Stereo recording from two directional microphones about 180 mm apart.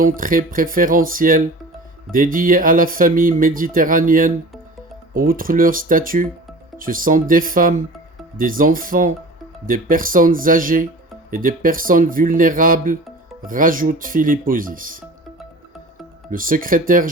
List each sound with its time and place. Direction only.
0.0 s speech: 50° right (ahead or behind)
16.3 s speech: 50° right (ahead or behind)